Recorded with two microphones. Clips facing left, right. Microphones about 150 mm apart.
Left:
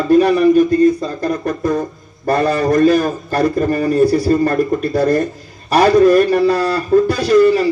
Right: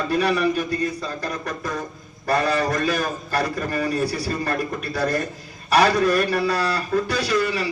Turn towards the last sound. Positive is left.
turn(degrees=45)  # may be behind; listen again after turning